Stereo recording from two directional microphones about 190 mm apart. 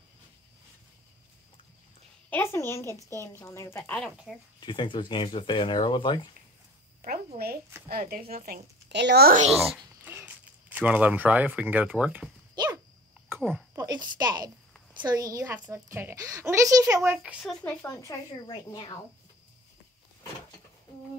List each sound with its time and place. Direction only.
2.2 s a woman's voice: 10° left (ahead or behind)
4.6 s speech: 25° left (ahead or behind)
7.0 s speech: 50° right (ahead or behind)
8.8 s a woman's voice: 65° right (ahead or behind)
10.0 s speech: 10° right (ahead or behind)
13.3 s speech: 10° right (ahead or behind)
13.7 s a woman's voice: 20° right (ahead or behind)
17.2 s speech: centre (ahead or behind)
17.8 s speech: 20° left (ahead or behind)